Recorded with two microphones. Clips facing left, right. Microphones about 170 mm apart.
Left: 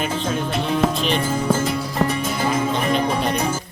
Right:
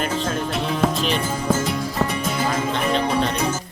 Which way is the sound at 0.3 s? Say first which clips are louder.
Left 1 dB; centre (ahead or behind).